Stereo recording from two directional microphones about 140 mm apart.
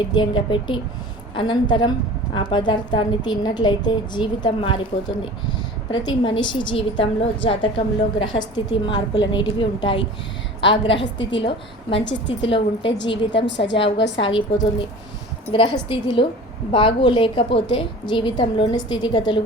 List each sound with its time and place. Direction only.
0.1 s a woman's voice: 35° left (ahead or behind)